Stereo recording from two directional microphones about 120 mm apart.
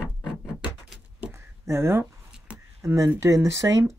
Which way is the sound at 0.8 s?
10° right (ahead or behind).